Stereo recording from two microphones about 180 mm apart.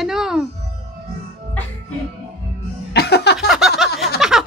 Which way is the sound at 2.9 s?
65° left (ahead or behind).